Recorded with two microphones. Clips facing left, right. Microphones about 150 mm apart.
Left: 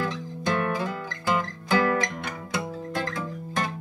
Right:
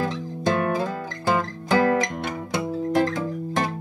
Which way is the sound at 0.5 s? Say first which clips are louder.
Right 4 dB; 35° right (ahead or behind).